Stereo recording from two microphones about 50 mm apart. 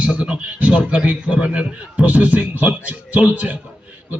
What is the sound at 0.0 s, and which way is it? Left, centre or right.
A man's voice, right.